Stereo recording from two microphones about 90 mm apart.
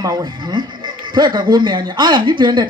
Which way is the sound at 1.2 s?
50° right (ahead or behind).